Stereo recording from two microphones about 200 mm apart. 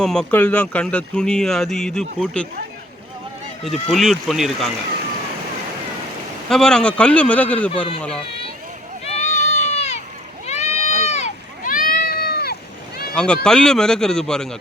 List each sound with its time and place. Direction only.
0.0 s speech: 5° left (ahead or behind)
3.6 s speech: centre (ahead or behind)
6.5 s speech: 5° left (ahead or behind)
9.1 s run: 35° left (ahead or behind)
10.4 s a sound: 35° left (ahead or behind); by 12.5 s 50° left (ahead or behind)
13.1 s speech: 5° left (ahead or behind)